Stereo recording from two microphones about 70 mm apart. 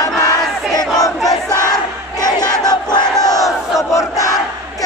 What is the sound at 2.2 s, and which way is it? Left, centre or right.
Battle cry, left.